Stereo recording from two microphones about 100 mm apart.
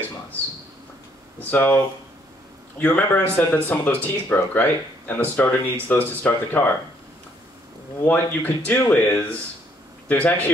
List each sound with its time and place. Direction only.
1.4 s speech: 20° left (ahead or behind)
2.8 s speech: 20° left (ahead or behind)
8.1 s speech: 15° left (ahead or behind)